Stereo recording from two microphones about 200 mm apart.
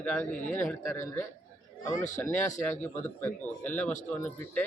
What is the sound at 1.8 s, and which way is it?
Speech, 40° left (ahead or behind).